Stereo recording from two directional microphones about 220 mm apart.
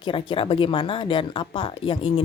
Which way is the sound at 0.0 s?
25° left (ahead or behind).